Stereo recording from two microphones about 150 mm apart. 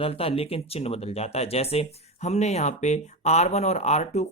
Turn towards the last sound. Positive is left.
turn(degrees=45)  # may be behind; listen again after turning